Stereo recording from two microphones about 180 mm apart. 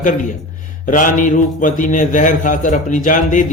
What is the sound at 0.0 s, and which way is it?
A man's voice, 45° left (ahead or behind).